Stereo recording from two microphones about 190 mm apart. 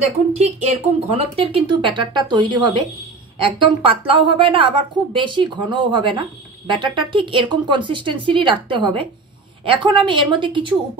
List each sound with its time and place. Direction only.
0.3 s a woman's voice: 35° right (ahead or behind)